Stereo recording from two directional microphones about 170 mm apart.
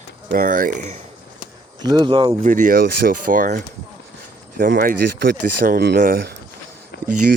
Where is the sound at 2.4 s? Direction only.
50° right (ahead or behind).